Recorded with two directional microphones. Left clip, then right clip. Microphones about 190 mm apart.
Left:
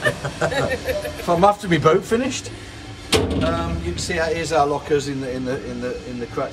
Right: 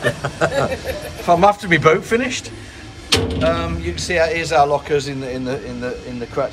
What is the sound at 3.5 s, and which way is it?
Speech, 15° left (ahead or behind).